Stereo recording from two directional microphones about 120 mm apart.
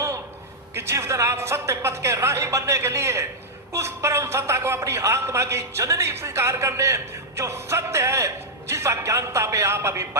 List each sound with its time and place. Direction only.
0.7 s speech: 20° right (ahead or behind)